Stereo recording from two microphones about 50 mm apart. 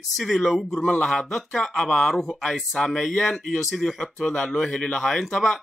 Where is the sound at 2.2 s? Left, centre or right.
Centre.